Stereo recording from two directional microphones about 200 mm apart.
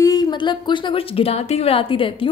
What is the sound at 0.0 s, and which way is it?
A woman's voice, 20° left (ahead or behind).